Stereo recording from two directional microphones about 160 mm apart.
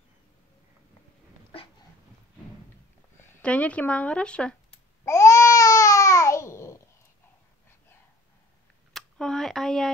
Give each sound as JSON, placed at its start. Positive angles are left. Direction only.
{"t": 3.4, "sound": "speech", "side_deg": 10}
{"t": 5.0, "sound": "babbling", "side_deg": 20}
{"t": 8.9, "sound": "a sound", "side_deg": 0}